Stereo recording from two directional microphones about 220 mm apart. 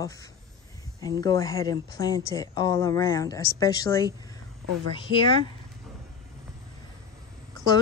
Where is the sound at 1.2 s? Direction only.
15° left (ahead or behind).